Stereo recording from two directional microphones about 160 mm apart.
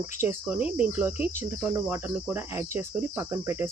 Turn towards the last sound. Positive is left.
turn(degrees=-15)  # may be behind; listen again after turning